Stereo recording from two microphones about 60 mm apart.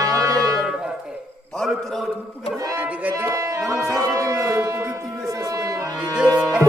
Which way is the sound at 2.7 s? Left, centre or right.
Right.